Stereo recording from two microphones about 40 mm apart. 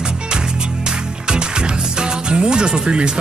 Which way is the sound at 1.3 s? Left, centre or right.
Right.